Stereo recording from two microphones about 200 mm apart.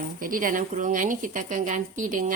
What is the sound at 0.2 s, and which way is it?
A woman's voice, 45° right (ahead or behind).